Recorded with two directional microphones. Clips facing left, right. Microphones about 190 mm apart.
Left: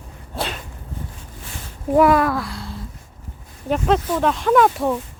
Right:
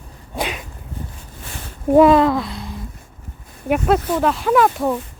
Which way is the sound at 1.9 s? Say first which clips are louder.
Right 4 dB; 25° right (ahead or behind).